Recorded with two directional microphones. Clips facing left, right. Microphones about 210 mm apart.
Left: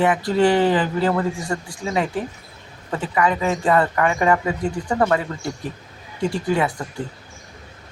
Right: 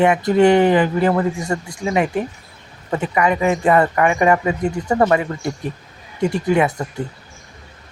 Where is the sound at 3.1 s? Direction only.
15° right (ahead or behind).